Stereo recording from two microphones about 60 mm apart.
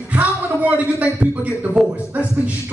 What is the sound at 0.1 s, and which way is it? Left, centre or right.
Speech, right.